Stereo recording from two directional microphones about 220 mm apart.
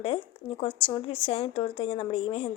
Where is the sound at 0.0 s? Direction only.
25° left (ahead or behind).